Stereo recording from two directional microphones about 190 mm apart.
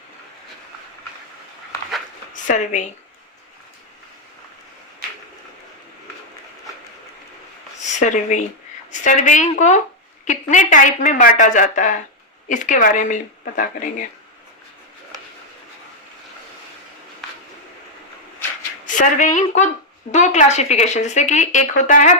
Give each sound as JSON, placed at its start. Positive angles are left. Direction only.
{"t": 2.3, "sound": "speech", "side_deg": 40}
{"t": 7.9, "sound": "a woman's voice", "side_deg": 40}
{"t": 17.2, "sound": "a sound", "side_deg": 0}
{"t": 18.9, "sound": "a woman's voice", "side_deg": 40}